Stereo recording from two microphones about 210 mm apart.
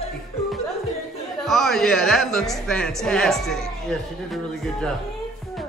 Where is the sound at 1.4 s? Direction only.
Centre (ahead or behind).